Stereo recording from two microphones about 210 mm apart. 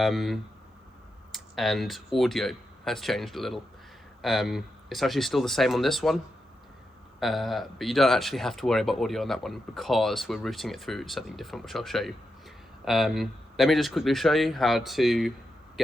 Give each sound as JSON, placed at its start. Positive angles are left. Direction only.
{"t": 0.0, "sound": "speech", "side_deg": 0}
{"t": 7.2, "sound": "speech", "side_deg": 0}